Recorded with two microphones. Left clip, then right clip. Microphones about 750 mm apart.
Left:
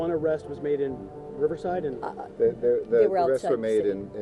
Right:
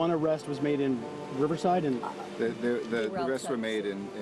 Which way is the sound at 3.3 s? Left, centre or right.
Left.